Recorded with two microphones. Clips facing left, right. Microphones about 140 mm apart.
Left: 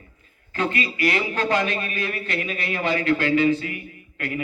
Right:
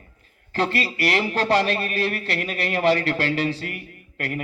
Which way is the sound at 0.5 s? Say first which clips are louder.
Right 1 dB; 35° right (ahead or behind).